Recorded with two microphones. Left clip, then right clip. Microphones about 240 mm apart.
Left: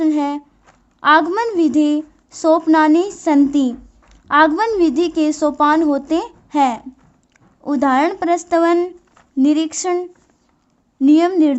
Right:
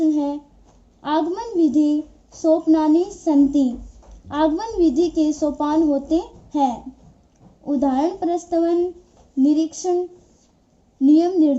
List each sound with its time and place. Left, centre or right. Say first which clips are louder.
0.0 s a sound: left 3 dB; left
1.0 s a woman's voice: left 9 dB; left
11.1 s speech: left 3 dB; left